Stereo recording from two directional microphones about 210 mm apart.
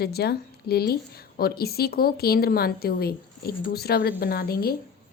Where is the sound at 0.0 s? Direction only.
50° left (ahead or behind).